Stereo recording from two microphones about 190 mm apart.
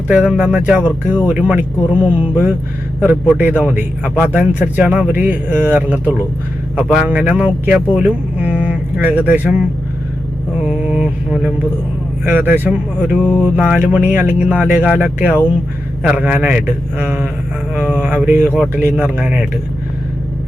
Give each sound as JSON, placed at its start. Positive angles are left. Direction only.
{"t": 0.1, "sound": "mantra", "side_deg": -5}
{"t": 1.3, "sound": "speech", "side_deg": -10}
{"t": 10.7, "sound": "mantra", "side_deg": -5}
{"t": 12.2, "sound": "speech", "side_deg": -10}
{"t": 13.1, "sound": "mantra", "side_deg": 5}
{"t": 13.4, "sound": "speech", "side_deg": -5}